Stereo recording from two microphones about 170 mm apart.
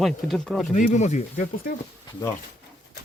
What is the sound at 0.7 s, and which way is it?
Speech, 45° left (ahead or behind).